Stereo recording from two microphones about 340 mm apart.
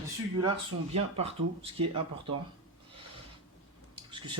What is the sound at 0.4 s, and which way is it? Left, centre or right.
Speech, centre.